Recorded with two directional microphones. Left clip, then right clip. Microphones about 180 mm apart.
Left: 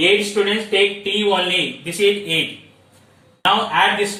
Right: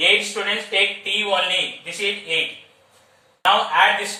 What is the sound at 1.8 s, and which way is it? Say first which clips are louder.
Speech: left 7 dB; centre (ahead or behind).